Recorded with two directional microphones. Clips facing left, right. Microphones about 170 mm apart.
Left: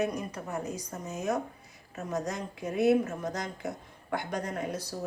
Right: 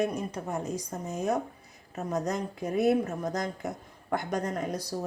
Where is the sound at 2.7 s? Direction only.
40° right (ahead or behind).